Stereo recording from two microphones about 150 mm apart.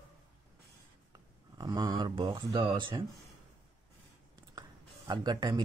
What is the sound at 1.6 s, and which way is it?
Speech, 25° right (ahead or behind).